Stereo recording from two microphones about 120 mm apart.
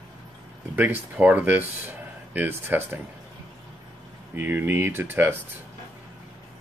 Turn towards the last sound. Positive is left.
turn(degrees=-15)  # may be behind; listen again after turning